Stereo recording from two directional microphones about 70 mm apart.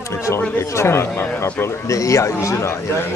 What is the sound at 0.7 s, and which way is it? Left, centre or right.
Speech, left.